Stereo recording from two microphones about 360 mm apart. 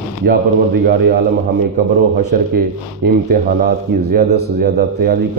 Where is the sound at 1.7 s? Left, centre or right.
Right.